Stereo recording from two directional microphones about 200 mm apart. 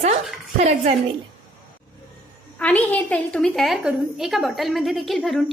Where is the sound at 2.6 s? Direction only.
5° left (ahead or behind).